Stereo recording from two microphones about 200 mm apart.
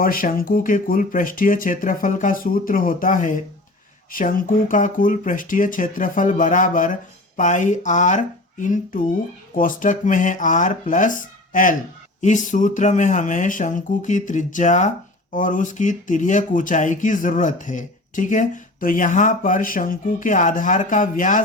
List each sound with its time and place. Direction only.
0.0 s speech: 45° left (ahead or behind)